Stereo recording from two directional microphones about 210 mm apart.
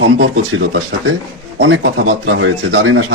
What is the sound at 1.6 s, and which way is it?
Speech, 60° right (ahead or behind).